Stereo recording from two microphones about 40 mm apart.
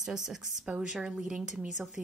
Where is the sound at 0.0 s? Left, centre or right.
Centre.